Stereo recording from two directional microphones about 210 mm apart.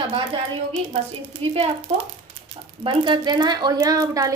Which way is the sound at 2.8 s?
25° right (ahead or behind).